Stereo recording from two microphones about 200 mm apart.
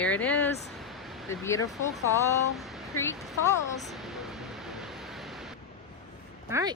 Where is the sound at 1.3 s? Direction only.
15° left (ahead or behind).